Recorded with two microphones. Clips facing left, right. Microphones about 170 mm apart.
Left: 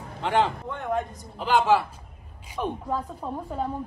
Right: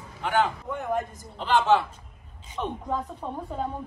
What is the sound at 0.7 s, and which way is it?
Speech, 5° right (ahead or behind).